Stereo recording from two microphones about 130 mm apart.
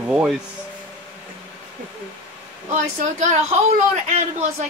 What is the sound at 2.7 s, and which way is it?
Speech, 70° right (ahead or behind).